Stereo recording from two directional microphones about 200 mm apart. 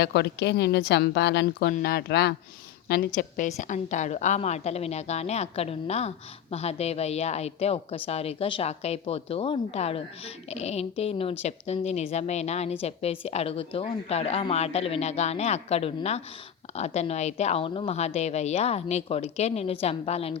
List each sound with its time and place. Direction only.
0.0 s a woman's voice: 55° left (ahead or behind); by 20.4 s 30° left (ahead or behind)